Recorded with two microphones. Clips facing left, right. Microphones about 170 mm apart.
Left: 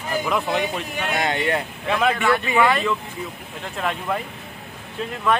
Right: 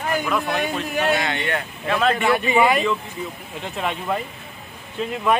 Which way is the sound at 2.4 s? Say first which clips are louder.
Right 3 dB; 15° right (ahead or behind).